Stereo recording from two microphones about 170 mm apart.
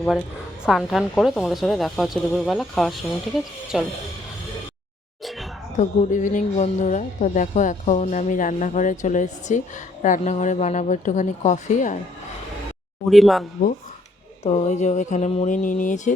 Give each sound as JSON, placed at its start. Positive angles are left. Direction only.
{"t": 0.0, "sound": "a woman's voice", "side_deg": 0}
{"t": 5.2, "sound": "a sound", "side_deg": 0}
{"t": 5.7, "sound": "speech", "side_deg": 45}
{"t": 13.1, "sound": "a woman's voice", "side_deg": 0}
{"t": 14.4, "sound": "speech", "side_deg": 40}